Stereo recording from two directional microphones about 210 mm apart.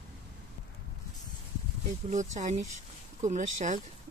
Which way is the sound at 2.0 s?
35° right (ahead or behind).